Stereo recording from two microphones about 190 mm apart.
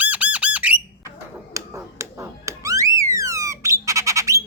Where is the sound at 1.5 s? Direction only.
15° right (ahead or behind).